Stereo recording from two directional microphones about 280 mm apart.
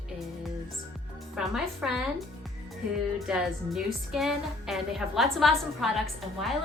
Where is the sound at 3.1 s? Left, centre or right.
Centre.